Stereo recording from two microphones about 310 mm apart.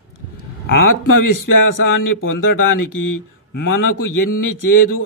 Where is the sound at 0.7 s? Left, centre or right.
Left.